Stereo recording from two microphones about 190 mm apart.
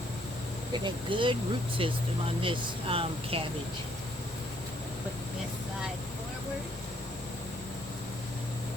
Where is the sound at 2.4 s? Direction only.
30° right (ahead or behind).